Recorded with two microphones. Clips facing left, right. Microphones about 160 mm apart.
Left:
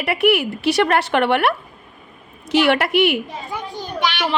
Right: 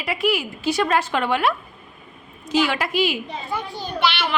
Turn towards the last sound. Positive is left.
turn(degrees=15)  # may be behind; listen again after turning